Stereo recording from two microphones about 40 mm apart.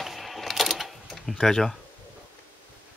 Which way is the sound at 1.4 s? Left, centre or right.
Centre.